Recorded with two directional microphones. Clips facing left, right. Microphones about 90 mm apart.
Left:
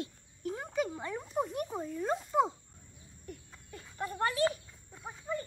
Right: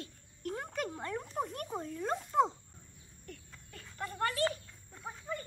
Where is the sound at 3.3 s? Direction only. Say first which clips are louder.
Left 3 dB; 20° left (ahead or behind).